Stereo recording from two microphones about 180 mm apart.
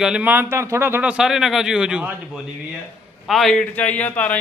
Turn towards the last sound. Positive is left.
turn(degrees=10)  # may be behind; listen again after turning